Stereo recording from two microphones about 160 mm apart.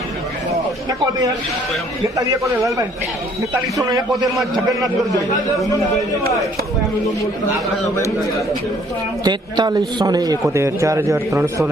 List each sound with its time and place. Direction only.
3.8 s a man's voice: 20° right (ahead or behind)
4.1 s a man's voice: centre (ahead or behind)
9.2 s a man's voice: 25° right (ahead or behind)